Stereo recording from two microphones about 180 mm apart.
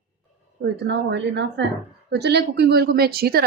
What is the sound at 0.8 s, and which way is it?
Speech, 70° right (ahead or behind).